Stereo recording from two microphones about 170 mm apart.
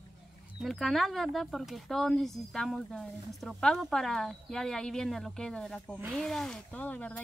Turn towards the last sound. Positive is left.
turn(degrees=10)  # may be behind; listen again after turning